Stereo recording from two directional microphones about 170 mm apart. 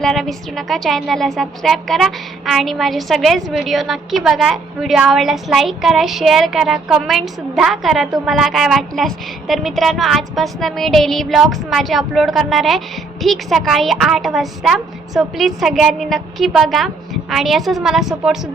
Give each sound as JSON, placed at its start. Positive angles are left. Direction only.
{"t": 0.0, "sound": "a woman's voice", "side_deg": 0}